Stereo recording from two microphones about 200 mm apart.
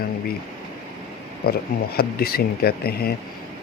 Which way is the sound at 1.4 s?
50° left (ahead or behind).